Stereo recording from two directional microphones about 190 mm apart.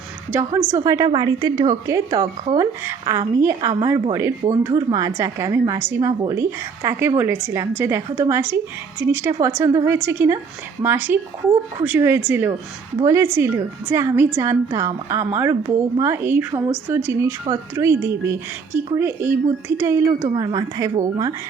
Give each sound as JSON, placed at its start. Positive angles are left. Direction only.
{"t": 0.3, "sound": "a woman's voice", "side_deg": -15}